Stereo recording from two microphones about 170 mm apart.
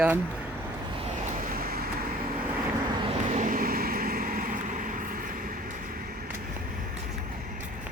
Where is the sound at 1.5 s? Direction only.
60° right (ahead or behind).